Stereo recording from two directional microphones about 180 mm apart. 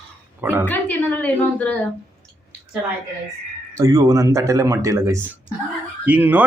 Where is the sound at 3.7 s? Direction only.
20° right (ahead or behind).